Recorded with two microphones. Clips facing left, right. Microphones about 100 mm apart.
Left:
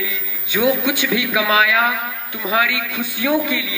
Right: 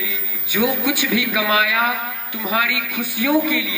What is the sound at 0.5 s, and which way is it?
A man's voice, 25° left (ahead or behind).